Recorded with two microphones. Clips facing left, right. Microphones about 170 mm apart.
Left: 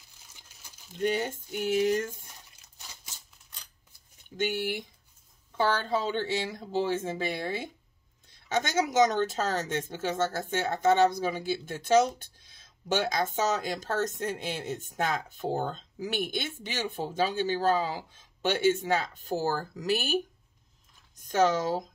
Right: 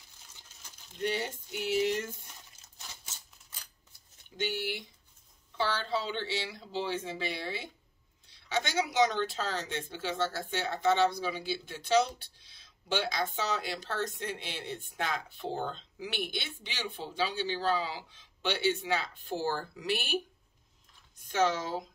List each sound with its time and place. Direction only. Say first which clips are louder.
0.3 s crumpling: even; 10° left (ahead or behind)
1.0 s speech: left 5 dB; 50° left (ahead or behind)
4.4 s speech: left 4 dB; 50° left (ahead or behind)
21.3 s speech: left 4 dB; 45° left (ahead or behind)